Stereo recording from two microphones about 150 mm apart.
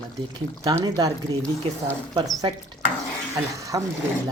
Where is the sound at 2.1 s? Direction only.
25° right (ahead or behind).